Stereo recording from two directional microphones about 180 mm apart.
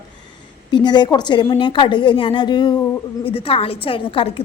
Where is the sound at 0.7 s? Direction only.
25° left (ahead or behind).